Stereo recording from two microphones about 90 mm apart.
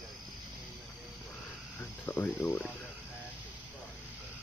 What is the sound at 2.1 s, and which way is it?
Speech, 30° left (ahead or behind).